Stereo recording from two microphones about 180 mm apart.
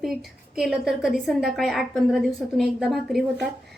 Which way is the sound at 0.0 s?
Centre (ahead or behind).